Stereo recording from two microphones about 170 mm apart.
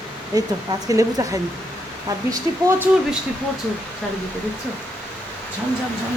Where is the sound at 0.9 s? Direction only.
20° right (ahead or behind).